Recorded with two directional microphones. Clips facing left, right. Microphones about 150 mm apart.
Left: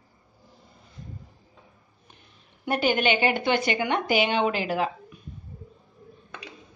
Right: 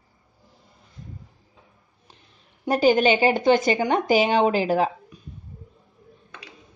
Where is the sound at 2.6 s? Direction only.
35° right (ahead or behind).